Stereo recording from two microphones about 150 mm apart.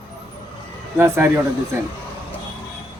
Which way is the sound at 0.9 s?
15° right (ahead or behind).